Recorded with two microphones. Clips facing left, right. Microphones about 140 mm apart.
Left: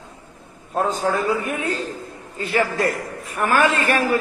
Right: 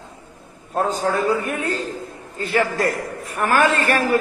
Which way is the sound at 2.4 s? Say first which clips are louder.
Right 1 dB; 40° right (ahead or behind).